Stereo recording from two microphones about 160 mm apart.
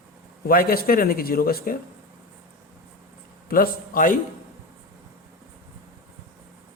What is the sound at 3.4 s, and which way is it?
Speech, 65° left (ahead or behind).